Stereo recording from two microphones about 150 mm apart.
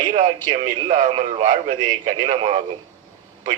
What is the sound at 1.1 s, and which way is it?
Speech, 45° right (ahead or behind).